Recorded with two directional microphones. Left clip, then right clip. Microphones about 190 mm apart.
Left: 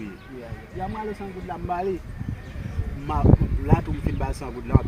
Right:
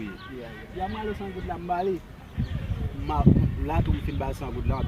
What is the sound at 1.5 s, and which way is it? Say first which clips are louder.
Speech: even; 10° right (ahead or behind).